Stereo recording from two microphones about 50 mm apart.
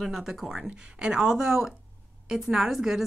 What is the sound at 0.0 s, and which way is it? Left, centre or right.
Speech, centre.